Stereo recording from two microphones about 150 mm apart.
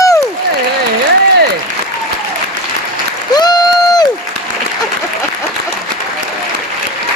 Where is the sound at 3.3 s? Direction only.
25° left (ahead or behind).